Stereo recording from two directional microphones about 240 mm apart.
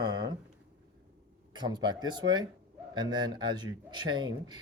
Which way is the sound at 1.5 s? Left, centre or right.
Centre.